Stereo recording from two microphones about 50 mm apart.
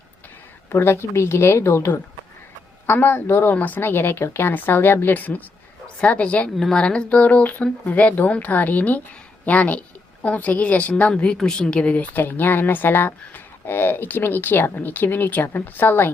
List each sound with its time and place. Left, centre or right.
0.8 s a woman's voice: left
2.8 s speech: left
3.5 s a woman's voice: left
3.8 s speech: left
4.5 s speech: left
6.0 s speech: left
6.6 s a woman's voice: centre
6.8 s a woman's voice: left
12.1 s speech: left